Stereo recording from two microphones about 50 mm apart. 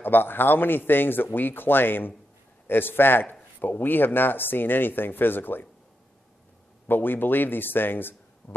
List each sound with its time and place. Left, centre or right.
0.0 s a man's voice: left
6.9 s a man's voice: left